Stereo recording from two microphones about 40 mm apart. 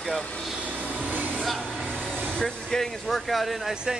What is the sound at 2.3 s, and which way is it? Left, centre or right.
Speech, centre.